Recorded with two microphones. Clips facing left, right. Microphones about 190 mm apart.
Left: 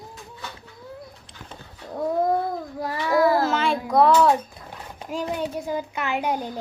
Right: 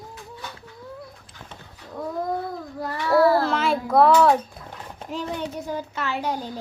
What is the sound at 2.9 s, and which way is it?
Speech, 15° left (ahead or behind).